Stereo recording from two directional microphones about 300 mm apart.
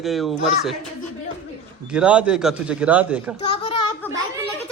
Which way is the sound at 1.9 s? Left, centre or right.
Centre.